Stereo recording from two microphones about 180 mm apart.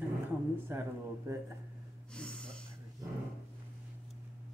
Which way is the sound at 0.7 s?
15° right (ahead or behind).